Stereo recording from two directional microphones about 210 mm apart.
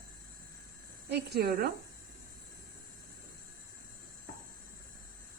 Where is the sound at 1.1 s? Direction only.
50° right (ahead or behind).